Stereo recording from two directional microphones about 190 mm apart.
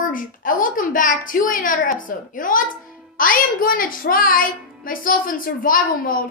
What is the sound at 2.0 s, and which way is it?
Speech, 45° left (ahead or behind).